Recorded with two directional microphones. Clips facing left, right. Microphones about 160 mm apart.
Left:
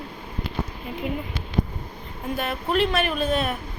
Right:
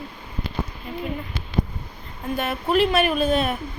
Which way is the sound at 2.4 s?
5° right (ahead or behind).